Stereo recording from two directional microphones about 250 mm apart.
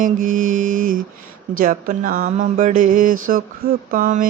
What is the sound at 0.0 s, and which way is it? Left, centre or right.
Mantra, right.